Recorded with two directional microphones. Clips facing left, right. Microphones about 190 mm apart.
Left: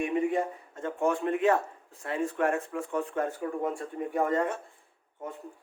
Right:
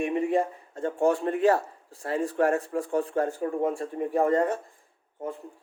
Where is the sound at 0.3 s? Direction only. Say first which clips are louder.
Right 4 dB; 30° right (ahead or behind).